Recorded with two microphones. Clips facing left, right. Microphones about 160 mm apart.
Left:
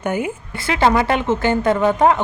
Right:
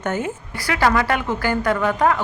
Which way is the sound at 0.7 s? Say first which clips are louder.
Left 3 dB; 25° left (ahead or behind).